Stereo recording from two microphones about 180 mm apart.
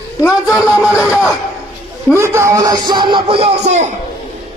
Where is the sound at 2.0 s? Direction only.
15° right (ahead or behind); by 3.9 s 40° right (ahead or behind).